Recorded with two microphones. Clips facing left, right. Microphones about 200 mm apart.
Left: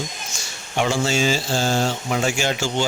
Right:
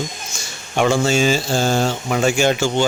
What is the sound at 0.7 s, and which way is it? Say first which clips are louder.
Speech: right 4 dB; 50° right (ahead or behind).